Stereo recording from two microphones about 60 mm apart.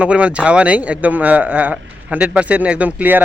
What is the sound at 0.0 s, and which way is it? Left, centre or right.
A man's voice, right.